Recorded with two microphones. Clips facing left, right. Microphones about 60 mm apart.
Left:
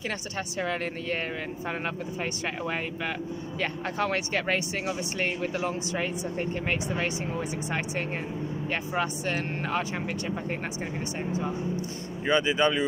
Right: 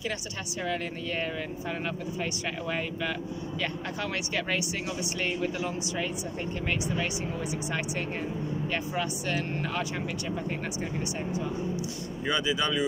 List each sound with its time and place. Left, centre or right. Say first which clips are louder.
0.6 s speech: left 1 dB; left
2.6 s speech: right 1 dB; left
12.3 s speech: left 5 dB; left